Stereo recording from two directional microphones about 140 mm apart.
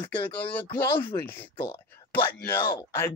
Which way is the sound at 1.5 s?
35° left (ahead or behind).